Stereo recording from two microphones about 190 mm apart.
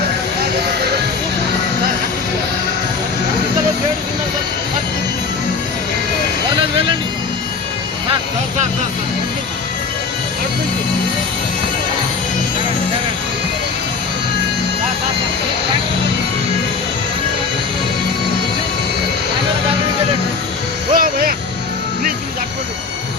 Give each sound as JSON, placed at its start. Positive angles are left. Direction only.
{"t": 20.9, "sound": "vehicle", "side_deg": -50}